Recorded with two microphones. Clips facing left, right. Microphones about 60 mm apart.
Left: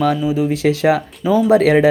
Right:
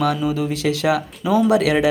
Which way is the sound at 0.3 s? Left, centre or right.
Left.